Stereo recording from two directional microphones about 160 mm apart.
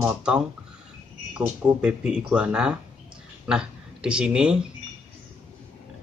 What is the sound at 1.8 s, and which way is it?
Speech, 5° right (ahead or behind).